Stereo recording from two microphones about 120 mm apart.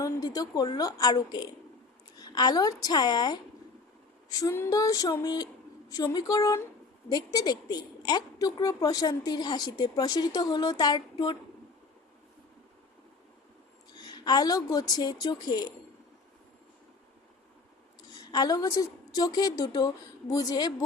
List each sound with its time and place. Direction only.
0.0 s a woman's voice: 30° left (ahead or behind)
4.4 s a woman's voice: 20° left (ahead or behind)
14.0 s a woman's voice: 35° left (ahead or behind)
18.2 s a woman's voice: 35° left (ahead or behind)